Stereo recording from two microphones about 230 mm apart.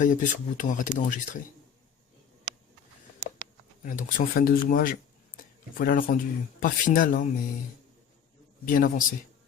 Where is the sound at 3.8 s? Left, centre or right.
Left.